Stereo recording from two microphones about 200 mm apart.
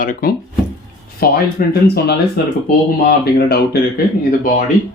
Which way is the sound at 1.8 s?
55° left (ahead or behind).